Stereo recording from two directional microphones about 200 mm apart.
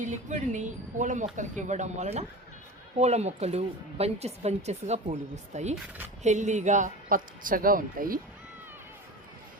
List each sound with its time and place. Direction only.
0.0 s a woman's voice: 35° right (ahead or behind)